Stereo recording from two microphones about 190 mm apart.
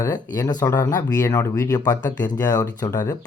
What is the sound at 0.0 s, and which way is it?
Speech, 20° left (ahead or behind).